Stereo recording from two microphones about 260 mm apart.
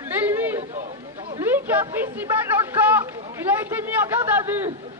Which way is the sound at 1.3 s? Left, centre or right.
Centre.